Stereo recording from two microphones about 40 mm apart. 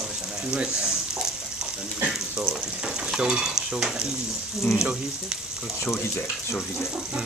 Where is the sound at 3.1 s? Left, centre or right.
Centre.